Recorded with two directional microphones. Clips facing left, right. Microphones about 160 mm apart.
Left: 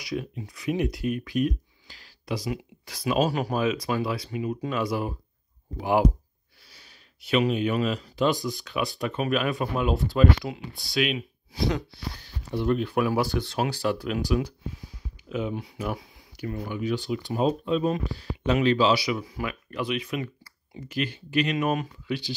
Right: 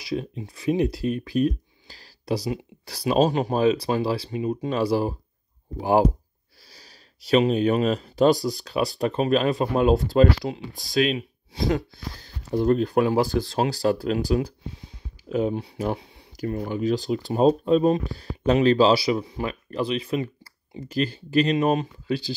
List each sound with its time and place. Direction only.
0.0 s speech: 30° right (ahead or behind)